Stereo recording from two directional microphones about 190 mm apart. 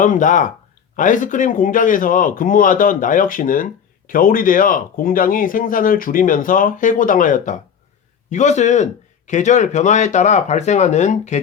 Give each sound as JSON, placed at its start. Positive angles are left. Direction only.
{"t": 0.0, "sound": "speech", "side_deg": 45}